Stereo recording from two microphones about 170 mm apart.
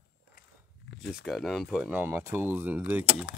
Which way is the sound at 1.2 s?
Centre (ahead or behind).